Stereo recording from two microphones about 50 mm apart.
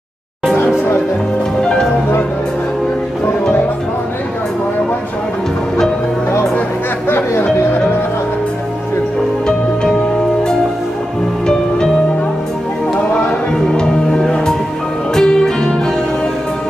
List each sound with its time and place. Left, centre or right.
1.6 s music: centre
7.1 s music: left
13.7 s music: centre